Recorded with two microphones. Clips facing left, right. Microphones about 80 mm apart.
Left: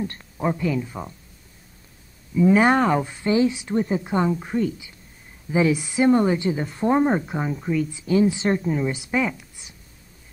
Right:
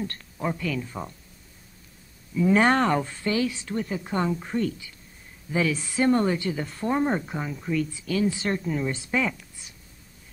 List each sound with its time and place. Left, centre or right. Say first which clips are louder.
0.0 s speech: left 4 dB; centre
2.3 s speech: left 3 dB; centre
4.0 s speech: left 4 dB; centre
8.0 s speech: left 6 dB; left